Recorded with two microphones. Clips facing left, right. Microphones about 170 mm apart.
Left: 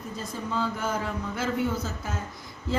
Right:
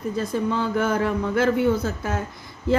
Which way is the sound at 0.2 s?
65° right (ahead or behind).